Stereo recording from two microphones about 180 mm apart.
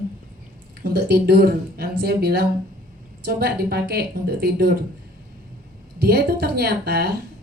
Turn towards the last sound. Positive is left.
turn(degrees=-60)  # may be behind; listen again after turning